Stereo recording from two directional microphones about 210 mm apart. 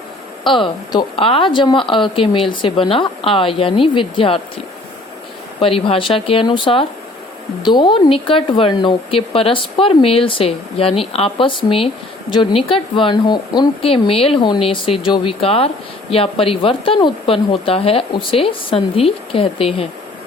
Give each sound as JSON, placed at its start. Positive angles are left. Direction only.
{"t": 0.4, "sound": "speech", "side_deg": 25}
{"t": 5.5, "sound": "speech", "side_deg": 25}